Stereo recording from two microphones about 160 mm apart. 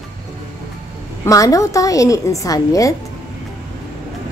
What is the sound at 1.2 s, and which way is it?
A woman's voice, 20° left (ahead or behind).